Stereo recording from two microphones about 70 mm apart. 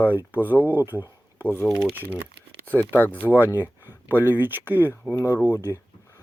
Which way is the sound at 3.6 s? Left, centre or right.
Right.